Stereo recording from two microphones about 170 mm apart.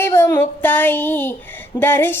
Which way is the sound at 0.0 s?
15° left (ahead or behind).